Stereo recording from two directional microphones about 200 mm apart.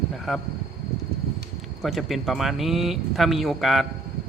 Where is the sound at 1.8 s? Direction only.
Centre (ahead or behind).